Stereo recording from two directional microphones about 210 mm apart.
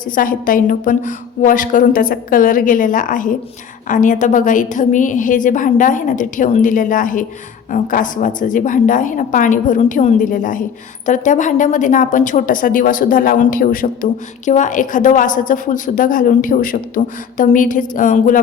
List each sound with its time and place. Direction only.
0.0 s a woman's voice: 40° left (ahead or behind)